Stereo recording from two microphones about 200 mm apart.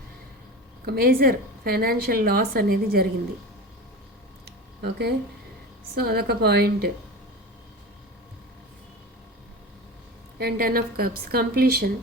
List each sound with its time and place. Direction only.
0.9 s a woman's voice: 50° right (ahead or behind)
4.8 s a woman's voice: 55° right (ahead or behind)
10.3 s a woman's voice: 50° right (ahead or behind)